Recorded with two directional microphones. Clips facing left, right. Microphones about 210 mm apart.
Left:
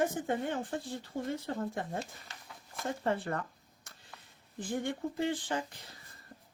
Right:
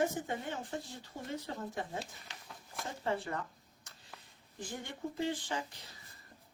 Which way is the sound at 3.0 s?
55° left (ahead or behind).